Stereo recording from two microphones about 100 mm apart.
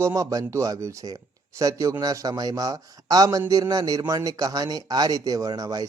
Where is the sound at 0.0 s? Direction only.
35° right (ahead or behind).